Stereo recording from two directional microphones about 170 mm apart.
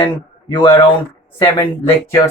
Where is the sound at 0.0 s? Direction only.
30° left (ahead or behind).